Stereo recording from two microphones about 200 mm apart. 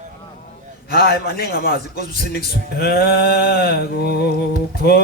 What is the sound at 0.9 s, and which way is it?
Music, 50° left (ahead or behind).